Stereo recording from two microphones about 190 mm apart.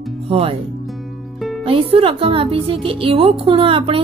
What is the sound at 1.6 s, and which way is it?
Speech, 30° right (ahead or behind).